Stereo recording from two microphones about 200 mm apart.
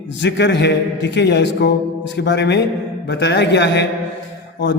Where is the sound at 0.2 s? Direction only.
60° left (ahead or behind).